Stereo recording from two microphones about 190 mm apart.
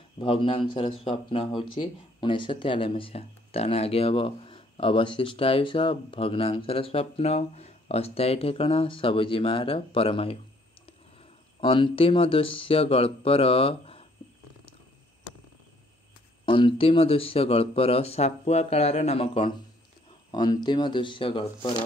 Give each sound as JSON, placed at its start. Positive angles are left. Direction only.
{"t": 0.2, "sound": "speech", "side_deg": 30}
{"t": 11.6, "sound": "speech", "side_deg": 25}
{"t": 16.4, "sound": "speech", "side_deg": 25}